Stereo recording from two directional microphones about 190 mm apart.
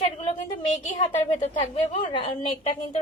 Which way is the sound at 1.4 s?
30° left (ahead or behind).